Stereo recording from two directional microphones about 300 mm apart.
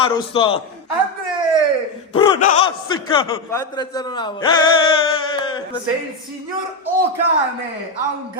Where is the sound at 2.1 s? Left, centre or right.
Centre.